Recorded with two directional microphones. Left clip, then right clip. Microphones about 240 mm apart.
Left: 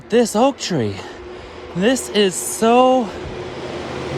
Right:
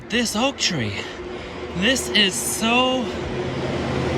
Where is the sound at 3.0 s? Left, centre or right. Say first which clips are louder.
Right 1 dB; right.